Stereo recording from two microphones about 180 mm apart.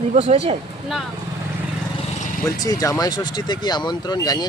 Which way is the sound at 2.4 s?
20° left (ahead or behind).